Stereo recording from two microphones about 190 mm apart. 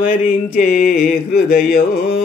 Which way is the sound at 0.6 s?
45° left (ahead or behind).